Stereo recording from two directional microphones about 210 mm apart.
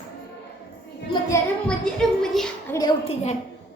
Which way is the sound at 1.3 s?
5° left (ahead or behind).